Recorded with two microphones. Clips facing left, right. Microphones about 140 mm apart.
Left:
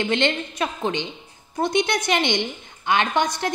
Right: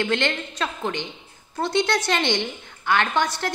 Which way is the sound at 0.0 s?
20° left (ahead or behind).